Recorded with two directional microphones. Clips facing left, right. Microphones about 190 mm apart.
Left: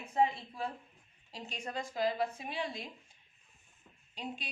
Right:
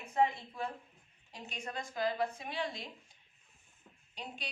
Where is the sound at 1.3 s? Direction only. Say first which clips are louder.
Left 2 dB; 35° left (ahead or behind).